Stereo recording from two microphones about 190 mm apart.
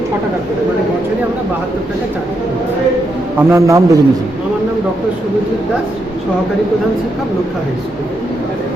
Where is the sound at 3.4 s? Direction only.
15° right (ahead or behind).